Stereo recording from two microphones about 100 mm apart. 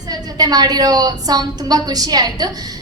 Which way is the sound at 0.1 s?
40° right (ahead or behind).